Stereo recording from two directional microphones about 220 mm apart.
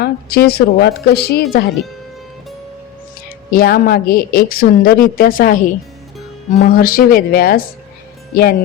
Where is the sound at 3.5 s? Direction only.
40° left (ahead or behind).